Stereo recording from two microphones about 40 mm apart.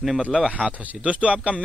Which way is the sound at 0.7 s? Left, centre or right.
Right.